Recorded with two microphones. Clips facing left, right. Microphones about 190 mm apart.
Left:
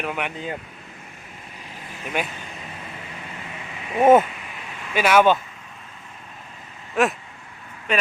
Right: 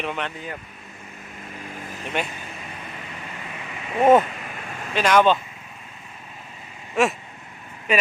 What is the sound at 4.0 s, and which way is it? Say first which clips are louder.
Speech: left 1 dB; 10° left (ahead or behind).